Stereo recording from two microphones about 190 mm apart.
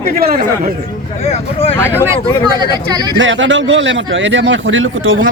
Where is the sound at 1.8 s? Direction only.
10° left (ahead or behind).